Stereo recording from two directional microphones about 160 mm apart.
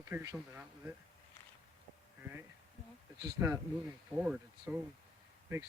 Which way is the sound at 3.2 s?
20° right (ahead or behind).